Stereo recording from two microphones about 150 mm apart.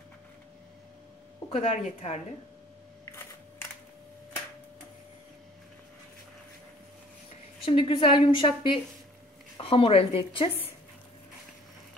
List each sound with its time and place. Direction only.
1.5 s speech: 55° left (ahead or behind)
7.6 s a woman's voice: 35° left (ahead or behind)